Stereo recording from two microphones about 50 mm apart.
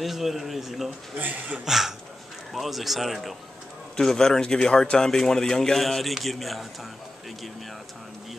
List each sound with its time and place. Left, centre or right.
0.0 s speech: centre
1.1 s a man's voice: right
1.6 s speech: centre
3.9 s speech: centre